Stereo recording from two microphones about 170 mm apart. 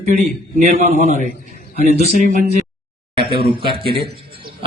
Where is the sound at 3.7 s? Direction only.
30° right (ahead or behind).